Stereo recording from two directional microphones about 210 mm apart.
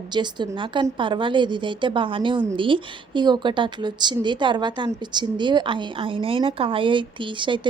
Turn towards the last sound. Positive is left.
turn(degrees=-25)  # may be behind; listen again after turning